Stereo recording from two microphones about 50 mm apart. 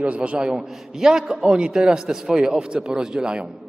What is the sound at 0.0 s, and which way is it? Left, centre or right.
A man's voice, right.